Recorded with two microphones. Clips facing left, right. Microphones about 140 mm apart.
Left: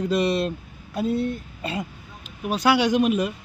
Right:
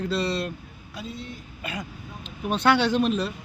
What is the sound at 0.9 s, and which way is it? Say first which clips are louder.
Speech: left 13 dB; 55° left (ahead or behind).